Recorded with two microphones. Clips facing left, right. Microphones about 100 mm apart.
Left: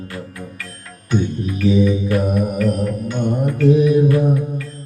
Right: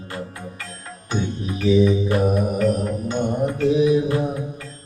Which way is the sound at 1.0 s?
25° right (ahead or behind).